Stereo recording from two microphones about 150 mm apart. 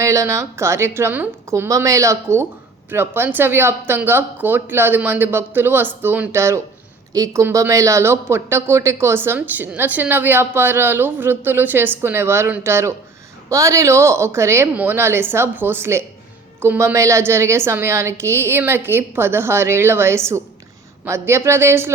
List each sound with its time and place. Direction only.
0.0 s a woman's voice: 20° right (ahead or behind)